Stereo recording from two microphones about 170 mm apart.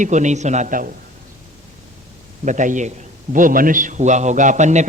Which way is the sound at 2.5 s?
45° right (ahead or behind).